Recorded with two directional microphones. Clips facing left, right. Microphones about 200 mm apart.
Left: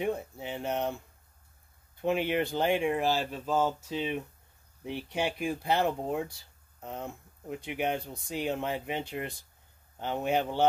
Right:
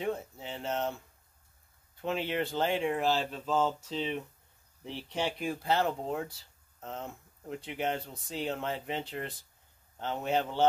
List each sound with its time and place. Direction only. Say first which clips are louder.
0.0 s speech: left 2 dB; 15° left (ahead or behind)
2.0 s speech: left 4 dB; 15° left (ahead or behind)